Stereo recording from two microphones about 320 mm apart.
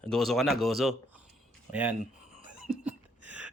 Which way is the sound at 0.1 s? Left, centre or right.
Centre.